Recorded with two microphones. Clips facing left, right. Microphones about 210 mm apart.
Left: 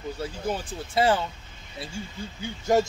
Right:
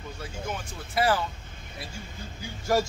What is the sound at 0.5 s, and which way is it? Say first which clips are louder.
Speech: left 7 dB; 30° left (ahead or behind).